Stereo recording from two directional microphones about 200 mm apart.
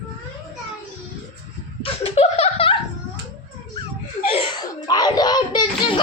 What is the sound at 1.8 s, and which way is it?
Laughter, 30° left (ahead or behind).